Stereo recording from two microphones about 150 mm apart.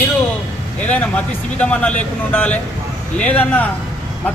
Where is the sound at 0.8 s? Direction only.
10° left (ahead or behind).